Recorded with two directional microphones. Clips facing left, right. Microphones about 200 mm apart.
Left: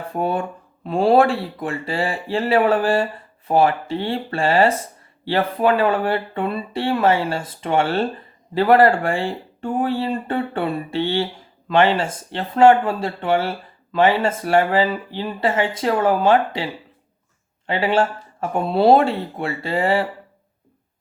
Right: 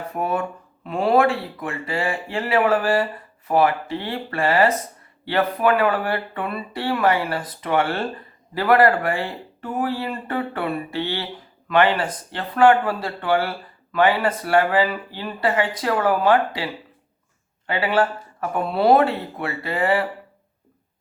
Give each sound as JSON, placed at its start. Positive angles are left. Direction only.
{"t": 0.1, "sound": "speech", "side_deg": 30}
{"t": 17.7, "sound": "speech", "side_deg": 25}